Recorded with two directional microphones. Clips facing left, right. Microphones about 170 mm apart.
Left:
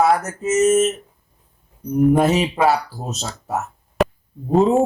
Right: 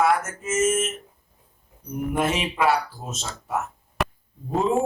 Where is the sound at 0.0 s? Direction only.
40° left (ahead or behind).